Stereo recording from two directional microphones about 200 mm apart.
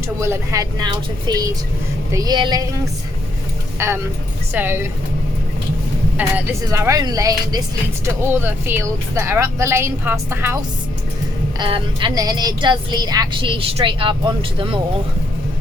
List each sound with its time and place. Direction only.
0.2 s speech: 15° right (ahead or behind)
3.8 s speech: 15° right (ahead or behind)
6.1 s speech: 10° right (ahead or behind)
11.6 s speech: 25° right (ahead or behind)